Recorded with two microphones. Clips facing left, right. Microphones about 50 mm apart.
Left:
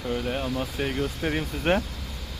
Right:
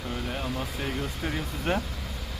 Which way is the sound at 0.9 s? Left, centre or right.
Left.